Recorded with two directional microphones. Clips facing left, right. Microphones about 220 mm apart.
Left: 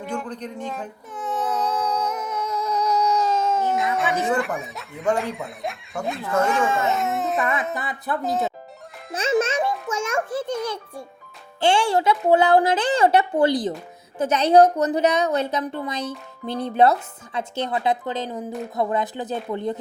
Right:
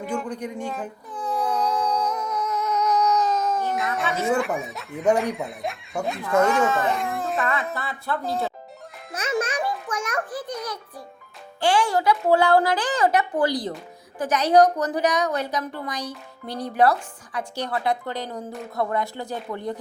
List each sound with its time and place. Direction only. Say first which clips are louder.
0.0 s speech: right 1 dB; 5° right (ahead or behind)
1.3 s a sound: even; centre (ahead or behind)
2.1 s a sound: even; 25° left (ahead or behind)
3.7 s speech: left 3 dB; centre (ahead or behind)
6.7 s a woman's voice: even; 25° left (ahead or behind)
6.9 s speech: left 3 dB; centre (ahead or behind)
7.4 s speech: left 2 dB; 20° left (ahead or behind)
9.1 s music: left 5 dB; 25° left (ahead or behind)
9.9 s a woman's voice: left 4 dB; 25° left (ahead or behind)